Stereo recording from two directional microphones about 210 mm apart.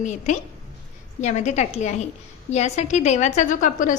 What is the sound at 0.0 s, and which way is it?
A woman's voice, 35° left (ahead or behind).